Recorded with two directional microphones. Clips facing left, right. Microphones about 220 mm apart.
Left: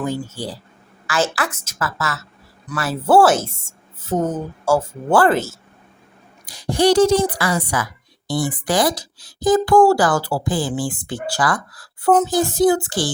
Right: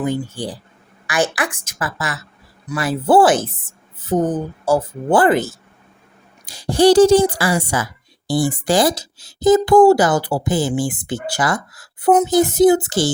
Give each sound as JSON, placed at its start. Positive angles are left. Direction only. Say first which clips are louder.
{"t": 0.0, "sound": "a woman's voice", "louder": "right 3 dB", "side_deg": -15}
{"t": 4.7, "sound": "a woman's voice", "louder": "right 1 dB", "side_deg": -20}
{"t": 6.4, "sound": "speech", "louder": "right 4 dB", "side_deg": -30}